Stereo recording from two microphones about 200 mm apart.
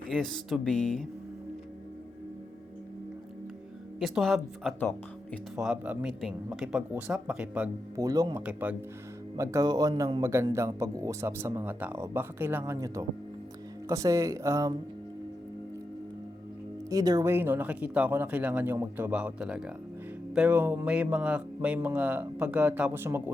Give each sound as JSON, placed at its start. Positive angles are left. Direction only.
{"t": 0.1, "sound": "speech", "side_deg": 0}
{"t": 4.0, "sound": "speech", "side_deg": 0}
{"t": 8.0, "sound": "speech", "side_deg": -20}
{"t": 16.9, "sound": "speech", "side_deg": -20}